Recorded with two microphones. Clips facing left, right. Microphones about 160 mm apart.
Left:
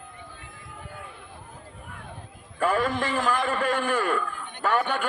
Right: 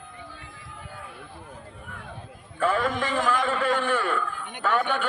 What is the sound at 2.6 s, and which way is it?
A man's voice, 40° left (ahead or behind).